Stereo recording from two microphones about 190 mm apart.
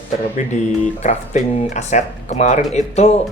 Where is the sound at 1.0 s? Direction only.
40° left (ahead or behind).